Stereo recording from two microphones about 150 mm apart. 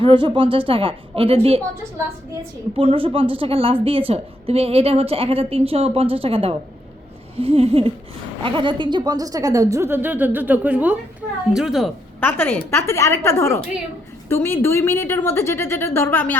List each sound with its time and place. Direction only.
0.0 s a woman's voice: 35° right (ahead or behind)
2.7 s a woman's voice: 40° right (ahead or behind); by 11.9 s centre (ahead or behind)
12.2 s a woman's voice: 15° left (ahead or behind)